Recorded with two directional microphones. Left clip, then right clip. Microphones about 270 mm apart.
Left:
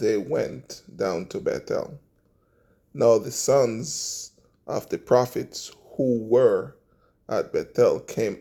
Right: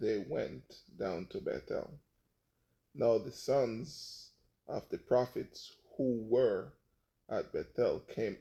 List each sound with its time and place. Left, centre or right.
0.0 s speech: left
2.9 s speech: left